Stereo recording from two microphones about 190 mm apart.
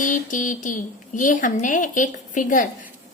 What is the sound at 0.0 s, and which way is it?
A woman's voice, 45° left (ahead or behind).